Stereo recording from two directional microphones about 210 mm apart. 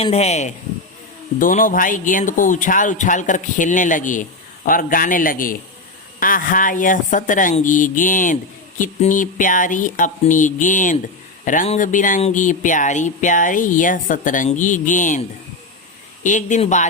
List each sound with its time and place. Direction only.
0.0 s speech: 30° left (ahead or behind)
16.2 s speech: 35° left (ahead or behind)